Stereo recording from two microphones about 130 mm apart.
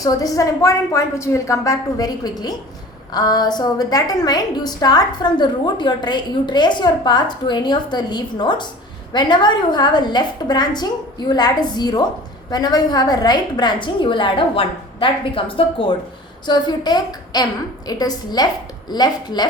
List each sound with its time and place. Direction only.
0.0 s a woman's voice: 30° left (ahead or behind)